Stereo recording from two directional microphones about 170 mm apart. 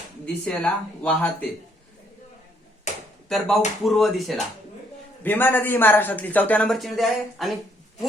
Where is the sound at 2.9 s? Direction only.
45° left (ahead or behind).